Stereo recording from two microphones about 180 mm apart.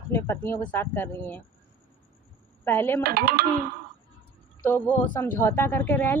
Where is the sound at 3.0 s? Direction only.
60° right (ahead or behind).